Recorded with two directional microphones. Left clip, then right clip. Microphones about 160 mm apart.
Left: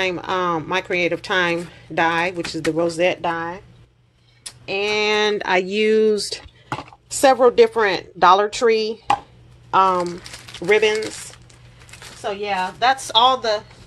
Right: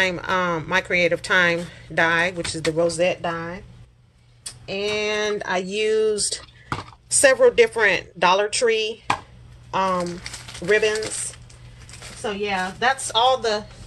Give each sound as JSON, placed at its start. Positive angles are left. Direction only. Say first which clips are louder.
{"t": 0.0, "sound": "speech", "louder": "even", "side_deg": 30}
{"t": 2.7, "sound": "speech", "louder": "left 1 dB", "side_deg": 45}
{"t": 4.6, "sound": "speech", "louder": "left 4 dB", "side_deg": 65}
{"t": 9.7, "sound": "speech", "louder": "left 6 dB", "side_deg": 55}
{"t": 12.2, "sound": "a woman's voice", "louder": "left 2 dB", "side_deg": 85}